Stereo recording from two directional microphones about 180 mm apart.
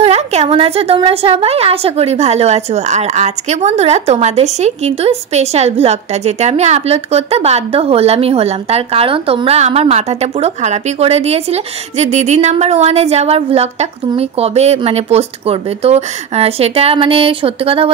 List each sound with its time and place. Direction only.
0.0 s a woman's voice: 35° right (ahead or behind)